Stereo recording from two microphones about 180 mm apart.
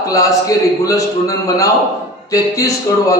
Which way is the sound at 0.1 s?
20° left (ahead or behind).